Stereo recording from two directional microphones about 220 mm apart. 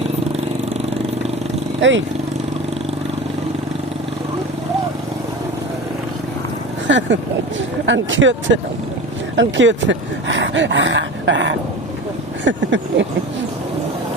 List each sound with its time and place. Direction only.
1.8 s speech: 55° right (ahead or behind)
6.8 s speech: 55° right (ahead or behind)